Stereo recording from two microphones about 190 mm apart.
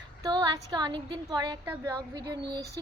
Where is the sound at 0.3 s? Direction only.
20° right (ahead or behind).